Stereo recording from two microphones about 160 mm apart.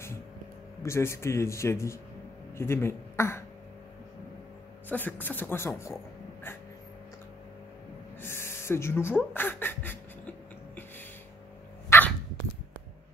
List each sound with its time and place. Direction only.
0.8 s a man's voice: 15° left (ahead or behind)
4.8 s speech: 10° left (ahead or behind)
8.2 s a sound: 15° left (ahead or behind)
11.9 s dog: 15° left (ahead or behind)